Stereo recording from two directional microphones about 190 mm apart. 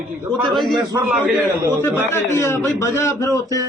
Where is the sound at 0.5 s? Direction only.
Centre (ahead or behind).